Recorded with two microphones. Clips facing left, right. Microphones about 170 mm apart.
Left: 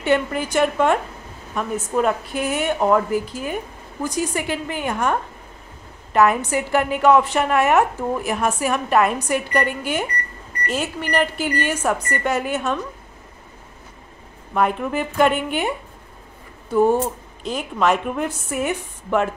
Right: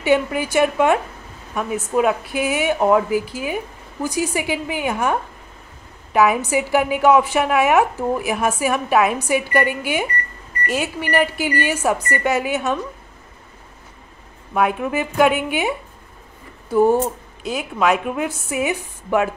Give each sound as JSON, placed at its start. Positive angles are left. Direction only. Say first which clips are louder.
{"t": 0.0, "sound": "a woman's voice", "louder": "right 2 dB", "side_deg": -5}
{"t": 14.5, "sound": "a woman's voice", "louder": "right 1 dB", "side_deg": -5}